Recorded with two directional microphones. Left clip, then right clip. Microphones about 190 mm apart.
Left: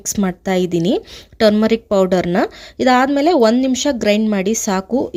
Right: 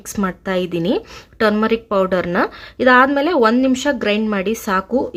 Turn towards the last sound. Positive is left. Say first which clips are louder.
# even
turn(degrees=40)  # may be behind; listen again after turning